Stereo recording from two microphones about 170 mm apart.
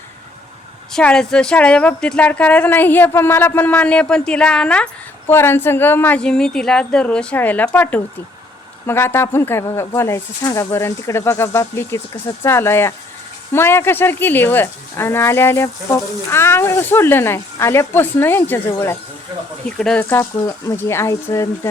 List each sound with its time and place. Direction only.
0.9 s speech: 5° left (ahead or behind)